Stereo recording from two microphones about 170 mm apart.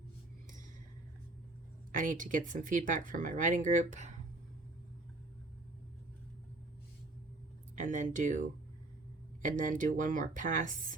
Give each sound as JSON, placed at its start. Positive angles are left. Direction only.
{"t": 2.0, "sound": "speech", "side_deg": -50}
{"t": 7.8, "sound": "speech", "side_deg": -50}